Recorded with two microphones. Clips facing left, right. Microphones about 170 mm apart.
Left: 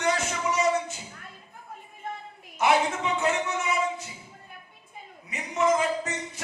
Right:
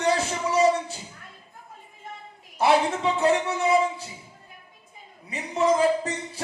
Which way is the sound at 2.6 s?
35° right (ahead or behind).